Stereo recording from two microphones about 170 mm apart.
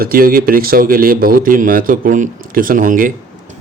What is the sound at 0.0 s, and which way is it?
A man's voice, 60° right (ahead or behind).